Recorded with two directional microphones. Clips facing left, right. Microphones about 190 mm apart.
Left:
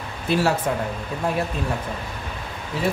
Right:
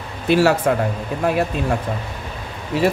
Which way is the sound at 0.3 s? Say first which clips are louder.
Right 6 dB; 75° right (ahead or behind).